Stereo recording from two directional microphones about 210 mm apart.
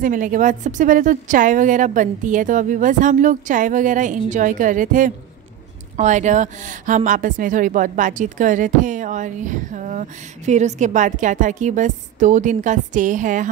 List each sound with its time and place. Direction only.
0.0 s speech: 40° right (ahead or behind)